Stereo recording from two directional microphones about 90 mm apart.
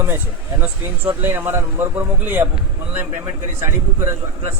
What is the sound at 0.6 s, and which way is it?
Speech, 25° right (ahead or behind).